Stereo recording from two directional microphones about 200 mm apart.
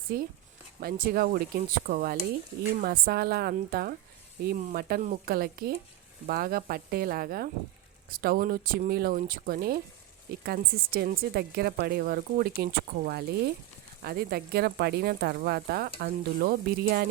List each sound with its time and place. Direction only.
0.1 s speech: 50° right (ahead or behind)